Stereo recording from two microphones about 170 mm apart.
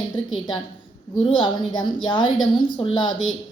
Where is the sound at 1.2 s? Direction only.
30° left (ahead or behind).